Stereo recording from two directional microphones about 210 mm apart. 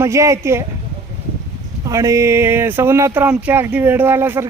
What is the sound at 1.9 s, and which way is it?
Speech, 15° right (ahead or behind).